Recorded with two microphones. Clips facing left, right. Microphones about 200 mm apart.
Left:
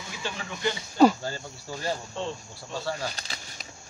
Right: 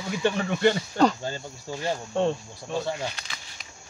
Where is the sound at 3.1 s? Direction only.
35° left (ahead or behind).